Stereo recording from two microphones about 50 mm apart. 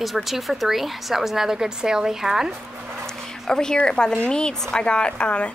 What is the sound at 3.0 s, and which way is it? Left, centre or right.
Dog, centre.